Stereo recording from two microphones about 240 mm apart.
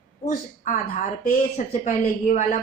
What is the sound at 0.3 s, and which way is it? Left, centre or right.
A woman's voice, left.